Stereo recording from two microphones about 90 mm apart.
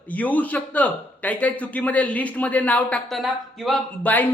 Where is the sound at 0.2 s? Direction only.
15° left (ahead or behind).